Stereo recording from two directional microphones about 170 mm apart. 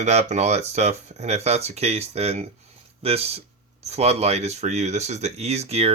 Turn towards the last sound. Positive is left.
turn(degrees=-35)  # may be behind; listen again after turning